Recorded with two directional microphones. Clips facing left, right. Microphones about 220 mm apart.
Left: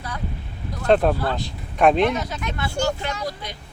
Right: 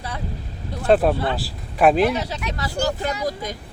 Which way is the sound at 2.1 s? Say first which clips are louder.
Right 1 dB; 35° right (ahead or behind).